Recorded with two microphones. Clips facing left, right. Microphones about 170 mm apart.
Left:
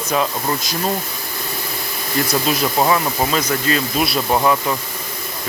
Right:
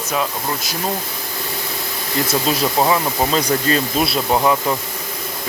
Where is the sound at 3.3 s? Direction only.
35° right (ahead or behind).